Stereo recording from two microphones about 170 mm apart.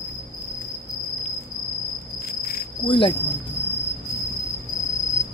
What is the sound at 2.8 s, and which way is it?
Speech, 30° left (ahead or behind).